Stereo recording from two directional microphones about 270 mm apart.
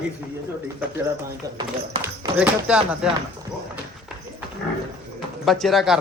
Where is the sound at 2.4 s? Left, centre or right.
Centre.